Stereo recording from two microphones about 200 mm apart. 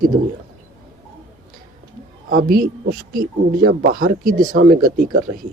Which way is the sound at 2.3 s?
45° right (ahead or behind).